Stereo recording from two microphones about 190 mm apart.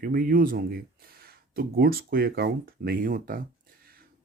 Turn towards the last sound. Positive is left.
turn(degrees=-50)  # may be behind; listen again after turning